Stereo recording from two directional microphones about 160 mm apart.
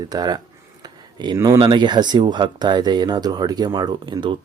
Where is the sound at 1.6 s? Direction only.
30° right (ahead or behind).